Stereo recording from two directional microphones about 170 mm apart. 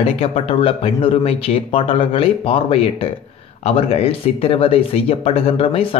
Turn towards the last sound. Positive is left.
turn(degrees=35)  # may be behind; listen again after turning